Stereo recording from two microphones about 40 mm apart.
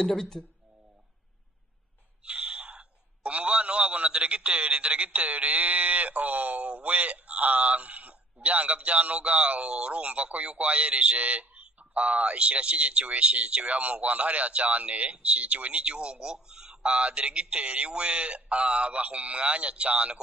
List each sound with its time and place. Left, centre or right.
0.0 s speech: centre
2.2 s a sound: right
3.3 s a man's voice: right
16.8 s speech: right